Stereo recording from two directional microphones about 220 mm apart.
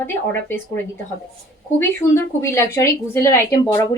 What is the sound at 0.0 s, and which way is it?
Speech, 10° left (ahead or behind).